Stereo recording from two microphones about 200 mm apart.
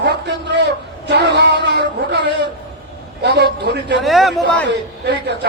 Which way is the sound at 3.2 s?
60° right (ahead or behind).